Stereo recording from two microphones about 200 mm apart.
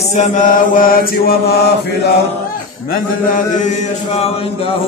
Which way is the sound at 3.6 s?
30° left (ahead or behind).